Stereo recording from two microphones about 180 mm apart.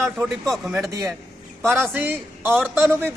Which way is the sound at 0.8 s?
15° right (ahead or behind).